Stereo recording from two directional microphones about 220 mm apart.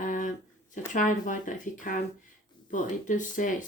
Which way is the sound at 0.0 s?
35° left (ahead or behind).